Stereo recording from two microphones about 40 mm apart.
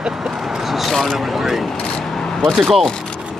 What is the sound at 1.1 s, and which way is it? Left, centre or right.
Speech, centre.